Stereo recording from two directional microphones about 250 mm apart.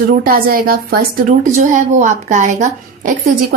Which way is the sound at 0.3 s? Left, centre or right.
Right.